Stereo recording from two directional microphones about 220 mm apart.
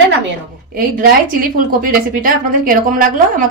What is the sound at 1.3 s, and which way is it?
A woman's voice, 40° right (ahead or behind).